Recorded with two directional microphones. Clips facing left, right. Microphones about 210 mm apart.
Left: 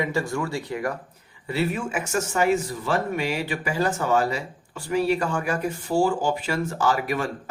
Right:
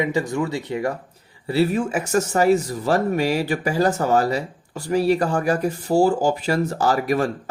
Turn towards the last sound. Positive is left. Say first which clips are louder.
# right 4 dB
turn(degrees=-40)  # may be behind; listen again after turning